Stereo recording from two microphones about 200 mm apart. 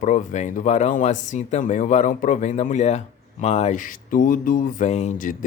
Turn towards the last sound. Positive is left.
turn(degrees=40)  # may be behind; listen again after turning